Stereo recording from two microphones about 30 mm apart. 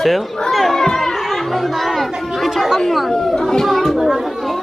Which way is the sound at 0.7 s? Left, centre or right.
Centre.